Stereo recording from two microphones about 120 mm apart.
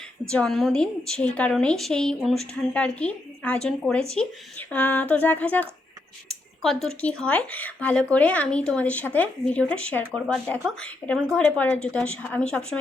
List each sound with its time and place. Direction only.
0.3 s speech: 5° left (ahead or behind)